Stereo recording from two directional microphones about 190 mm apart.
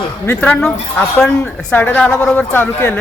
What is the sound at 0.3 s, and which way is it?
A woman's voice, 5° left (ahead or behind).